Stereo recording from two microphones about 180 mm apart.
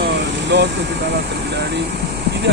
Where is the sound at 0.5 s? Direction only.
70° right (ahead or behind).